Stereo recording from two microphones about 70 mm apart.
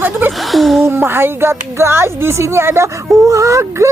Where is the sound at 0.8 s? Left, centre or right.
Right.